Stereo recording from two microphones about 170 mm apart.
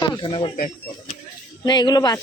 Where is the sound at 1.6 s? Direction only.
25° left (ahead or behind).